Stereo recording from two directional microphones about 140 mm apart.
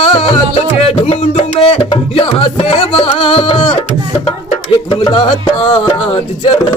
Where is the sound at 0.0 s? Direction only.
40° left (ahead or behind).